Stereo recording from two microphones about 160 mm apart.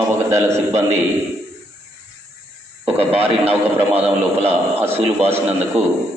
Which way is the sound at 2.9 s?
35° right (ahead or behind).